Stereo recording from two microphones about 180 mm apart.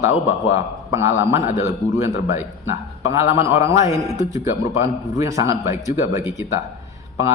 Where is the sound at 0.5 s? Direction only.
15° right (ahead or behind).